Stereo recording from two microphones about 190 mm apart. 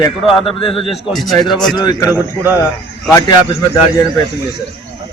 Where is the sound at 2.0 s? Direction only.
10° right (ahead or behind).